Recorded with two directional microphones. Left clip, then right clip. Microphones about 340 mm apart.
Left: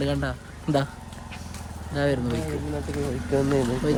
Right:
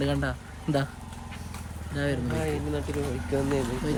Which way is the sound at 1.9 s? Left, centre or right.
Centre.